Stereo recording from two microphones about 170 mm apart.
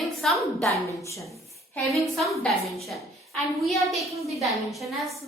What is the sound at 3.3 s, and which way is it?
A woman's voice, centre (ahead or behind).